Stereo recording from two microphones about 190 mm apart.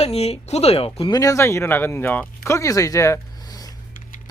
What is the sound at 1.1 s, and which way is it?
Speech, 15° left (ahead or behind).